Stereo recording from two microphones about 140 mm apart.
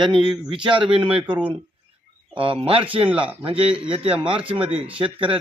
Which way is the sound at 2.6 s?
40° right (ahead or behind).